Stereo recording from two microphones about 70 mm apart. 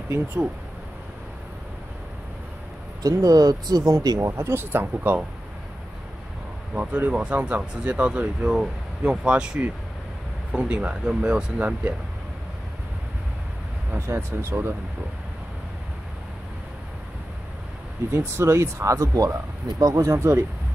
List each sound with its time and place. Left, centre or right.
3.0 s speech: right
4.2 s speech: right
6.7 s speech: right
13.9 s speech: right
18.1 s speech: right